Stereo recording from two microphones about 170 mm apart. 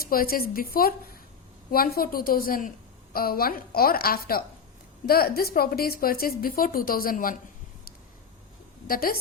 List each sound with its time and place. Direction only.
0.0 s a woman's voice: 60° left (ahead or behind)
8.9 s a woman's voice: 60° left (ahead or behind)